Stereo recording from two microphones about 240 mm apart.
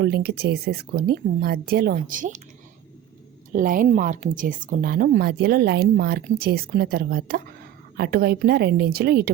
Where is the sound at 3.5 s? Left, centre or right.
Right.